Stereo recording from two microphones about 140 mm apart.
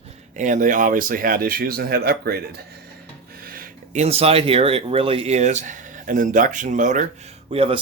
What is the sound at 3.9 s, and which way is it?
Speech, 50° right (ahead or behind).